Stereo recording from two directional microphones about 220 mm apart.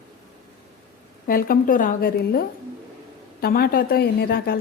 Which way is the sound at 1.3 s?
40° left (ahead or behind).